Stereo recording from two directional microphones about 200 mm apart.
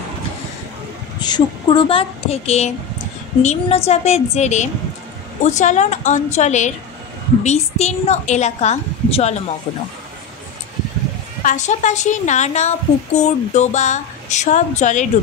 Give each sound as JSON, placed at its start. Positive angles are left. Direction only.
{"t": 1.2, "sound": "a woman's voice", "side_deg": 20}
{"t": 11.4, "sound": "a woman's voice", "side_deg": 35}